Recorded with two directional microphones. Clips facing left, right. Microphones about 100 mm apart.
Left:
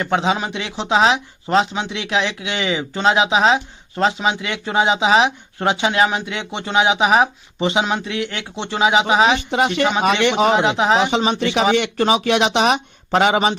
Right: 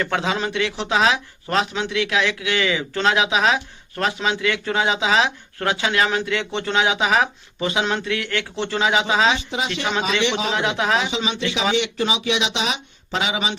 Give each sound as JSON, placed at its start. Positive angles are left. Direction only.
{"t": 0.0, "sound": "speech", "side_deg": 20}
{"t": 9.4, "sound": "speech", "side_deg": 60}
{"t": 10.5, "sound": "speech", "side_deg": 20}
{"t": 11.2, "sound": "speech", "side_deg": 50}